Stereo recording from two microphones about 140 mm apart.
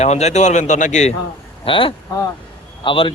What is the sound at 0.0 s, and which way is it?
Speech, 55° left (ahead or behind).